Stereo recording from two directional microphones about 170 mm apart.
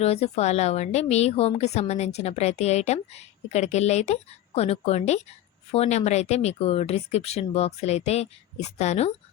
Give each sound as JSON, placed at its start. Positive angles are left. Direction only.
{"t": 0.0, "sound": "a woman's voice", "side_deg": 40}